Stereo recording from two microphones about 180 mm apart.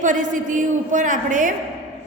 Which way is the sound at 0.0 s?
45° right (ahead or behind).